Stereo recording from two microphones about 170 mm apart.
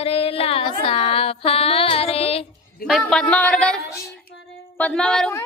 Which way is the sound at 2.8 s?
Centre (ahead or behind).